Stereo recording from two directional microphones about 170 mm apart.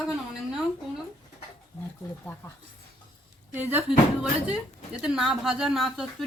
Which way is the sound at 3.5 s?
10° right (ahead or behind).